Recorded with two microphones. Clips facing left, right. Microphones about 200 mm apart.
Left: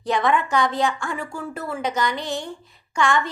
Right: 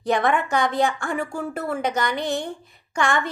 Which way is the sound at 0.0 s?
55° right (ahead or behind).